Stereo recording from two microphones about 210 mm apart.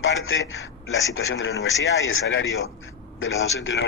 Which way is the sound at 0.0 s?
65° left (ahead or behind).